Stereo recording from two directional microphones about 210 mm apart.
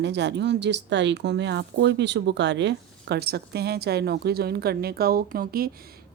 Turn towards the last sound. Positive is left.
turn(degrees=-45)  # may be behind; listen again after turning